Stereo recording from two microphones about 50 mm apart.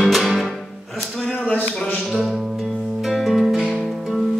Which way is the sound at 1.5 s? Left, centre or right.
Left.